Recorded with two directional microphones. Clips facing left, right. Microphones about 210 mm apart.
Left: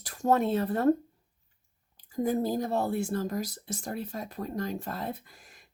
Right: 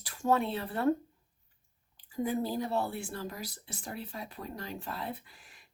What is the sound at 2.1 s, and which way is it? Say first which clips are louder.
Speech: left 4 dB; 40° left (ahead or behind).